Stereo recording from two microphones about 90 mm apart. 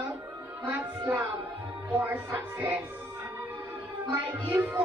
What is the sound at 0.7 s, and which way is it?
Music, 20° right (ahead or behind).